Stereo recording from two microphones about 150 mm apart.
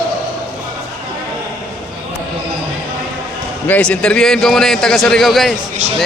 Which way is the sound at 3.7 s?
5° left (ahead or behind).